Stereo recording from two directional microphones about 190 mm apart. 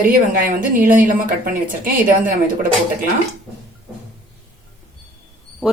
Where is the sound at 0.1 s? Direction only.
45° right (ahead or behind).